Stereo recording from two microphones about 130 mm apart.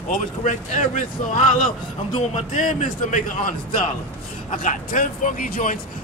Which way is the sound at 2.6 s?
85° left.